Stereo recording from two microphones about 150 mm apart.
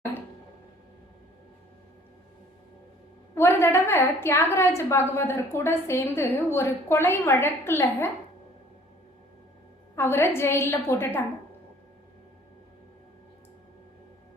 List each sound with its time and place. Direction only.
3.3 s a woman's voice: 15° left (ahead or behind)
9.9 s a woman's voice: 15° left (ahead or behind)